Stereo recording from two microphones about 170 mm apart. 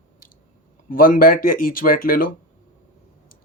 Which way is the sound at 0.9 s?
55° left (ahead or behind).